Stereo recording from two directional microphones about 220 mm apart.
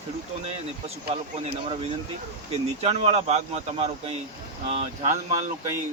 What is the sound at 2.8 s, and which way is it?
Speech, 30° right (ahead or behind).